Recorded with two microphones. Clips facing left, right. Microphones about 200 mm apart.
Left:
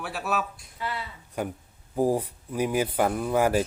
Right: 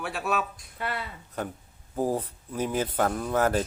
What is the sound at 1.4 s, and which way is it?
Speech, 10° left (ahead or behind).